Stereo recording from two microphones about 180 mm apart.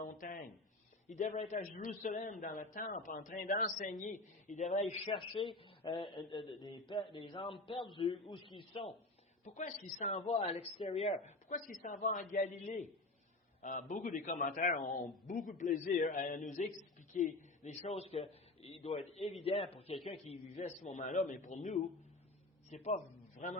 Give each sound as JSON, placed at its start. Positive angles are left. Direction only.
{"t": 0.0, "sound": "a sound", "side_deg": 50}
{"t": 1.0, "sound": "a man's voice", "side_deg": 40}
{"t": 9.4, "sound": "speech", "side_deg": 40}
{"t": 11.5, "sound": "a man's voice", "side_deg": 45}